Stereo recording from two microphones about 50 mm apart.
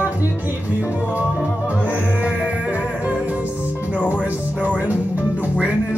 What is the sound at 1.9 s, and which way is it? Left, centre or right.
Music, right.